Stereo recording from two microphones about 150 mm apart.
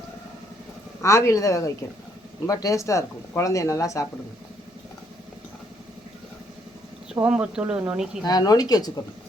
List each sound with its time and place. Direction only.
1.0 s speech: 20° left (ahead or behind)
7.1 s speech: 5° right (ahead or behind)
8.2 s speech: 25° left (ahead or behind)